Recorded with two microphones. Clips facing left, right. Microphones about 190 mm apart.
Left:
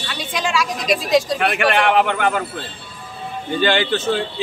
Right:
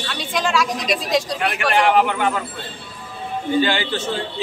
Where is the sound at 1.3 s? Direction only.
65° left (ahead or behind).